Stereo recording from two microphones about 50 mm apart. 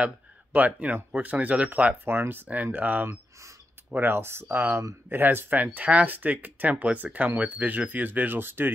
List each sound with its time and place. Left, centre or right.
0.0 s speech: right
2.0 s speech: right